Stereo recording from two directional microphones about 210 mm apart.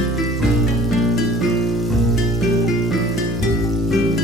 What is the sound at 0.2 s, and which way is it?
Music, centre (ahead or behind).